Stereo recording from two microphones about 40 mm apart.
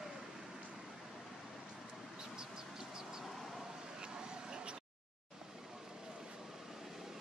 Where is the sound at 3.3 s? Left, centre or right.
Centre.